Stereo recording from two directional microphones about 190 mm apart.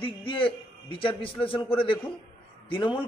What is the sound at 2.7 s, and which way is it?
Speech, 25° left (ahead or behind).